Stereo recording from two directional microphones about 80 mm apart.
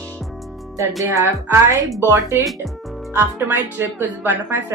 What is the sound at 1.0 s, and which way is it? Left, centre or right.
Music, right.